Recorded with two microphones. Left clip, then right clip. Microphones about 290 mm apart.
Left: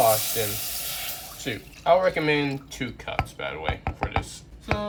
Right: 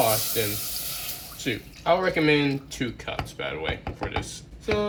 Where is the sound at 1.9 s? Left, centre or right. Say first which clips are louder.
Left 1 dB; left.